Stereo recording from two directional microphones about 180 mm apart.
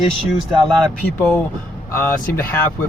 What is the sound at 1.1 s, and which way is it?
Speech, 10° left (ahead or behind).